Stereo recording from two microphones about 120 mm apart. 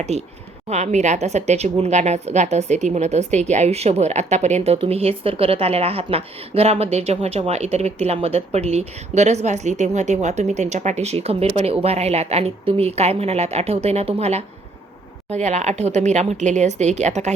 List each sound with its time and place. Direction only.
0.1 s speech: 65° right (ahead or behind)